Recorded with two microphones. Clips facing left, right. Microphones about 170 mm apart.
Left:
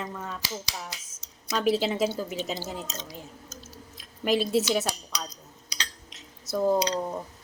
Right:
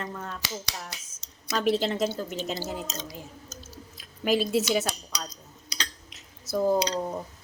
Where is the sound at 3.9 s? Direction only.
Centre (ahead or behind).